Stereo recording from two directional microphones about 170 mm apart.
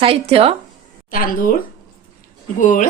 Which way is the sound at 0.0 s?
35° right (ahead or behind).